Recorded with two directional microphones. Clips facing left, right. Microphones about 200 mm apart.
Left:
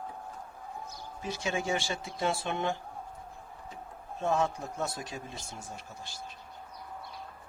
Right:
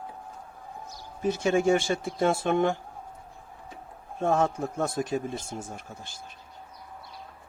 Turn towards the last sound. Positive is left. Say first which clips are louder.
# right 3 dB
turn(degrees=-50)  # may be behind; listen again after turning